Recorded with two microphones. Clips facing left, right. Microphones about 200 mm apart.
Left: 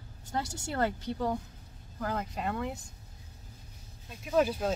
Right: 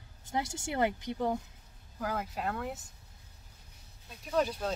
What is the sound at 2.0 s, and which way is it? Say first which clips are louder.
Speech: left 1 dB; 5° right (ahead or behind).